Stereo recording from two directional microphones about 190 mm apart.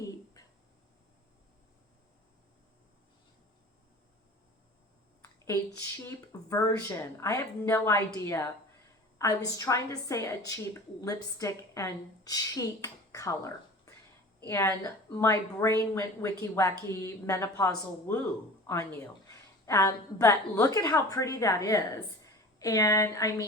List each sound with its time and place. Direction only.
6.1 s a woman's voice: 15° left (ahead or behind)